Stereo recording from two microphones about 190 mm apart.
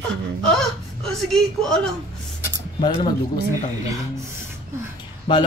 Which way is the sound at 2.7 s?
30° left (ahead or behind).